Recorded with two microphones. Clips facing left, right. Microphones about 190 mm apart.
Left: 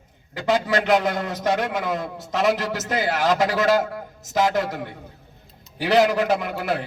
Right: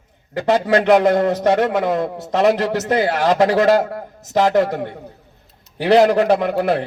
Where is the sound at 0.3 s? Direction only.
60° right (ahead or behind).